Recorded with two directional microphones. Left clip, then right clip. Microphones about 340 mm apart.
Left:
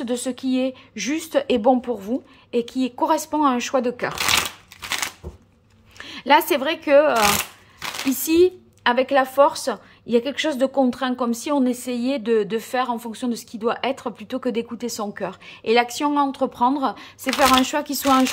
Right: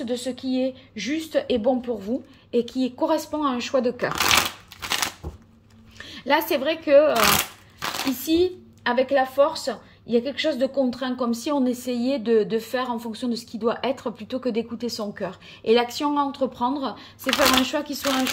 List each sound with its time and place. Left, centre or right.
0.0 s a woman's voice: centre
5.9 s speech: centre
8.2 s a woman's voice: centre